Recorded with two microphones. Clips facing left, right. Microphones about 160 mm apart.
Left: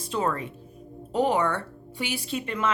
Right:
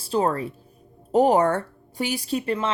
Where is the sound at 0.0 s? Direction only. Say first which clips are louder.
Right 5 dB; 35° right (ahead or behind).